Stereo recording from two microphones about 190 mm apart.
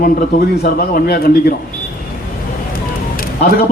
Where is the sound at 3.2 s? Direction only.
55° left (ahead or behind).